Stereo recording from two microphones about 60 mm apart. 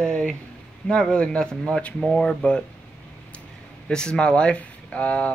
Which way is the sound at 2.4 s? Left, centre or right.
Left.